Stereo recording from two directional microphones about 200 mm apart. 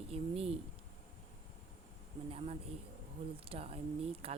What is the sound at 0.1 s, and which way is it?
Speech, 30° right (ahead or behind).